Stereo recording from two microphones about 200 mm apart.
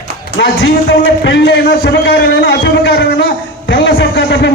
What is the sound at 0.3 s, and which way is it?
A man's voice, 60° left (ahead or behind).